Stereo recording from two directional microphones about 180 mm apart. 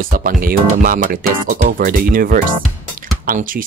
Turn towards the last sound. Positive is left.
turn(degrees=-50)  # may be behind; listen again after turning